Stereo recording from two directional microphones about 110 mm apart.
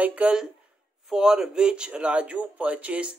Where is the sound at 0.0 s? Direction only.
10° right (ahead or behind).